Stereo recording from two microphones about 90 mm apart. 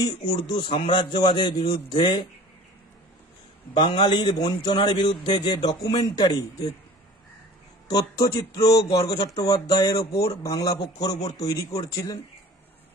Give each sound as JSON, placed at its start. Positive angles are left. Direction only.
{"t": 0.0, "sound": "a man's voice", "side_deg": 60}
{"t": 3.7, "sound": "speech", "side_deg": 55}
{"t": 7.9, "sound": "speech", "side_deg": 40}